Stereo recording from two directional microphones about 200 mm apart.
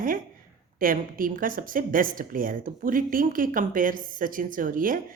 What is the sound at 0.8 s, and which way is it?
Speech, 45° right (ahead or behind).